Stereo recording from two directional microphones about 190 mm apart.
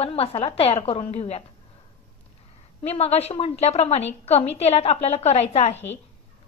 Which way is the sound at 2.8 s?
30° left (ahead or behind).